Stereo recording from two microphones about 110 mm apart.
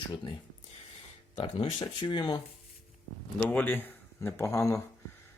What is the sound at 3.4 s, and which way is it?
Speech, 15° left (ahead or behind).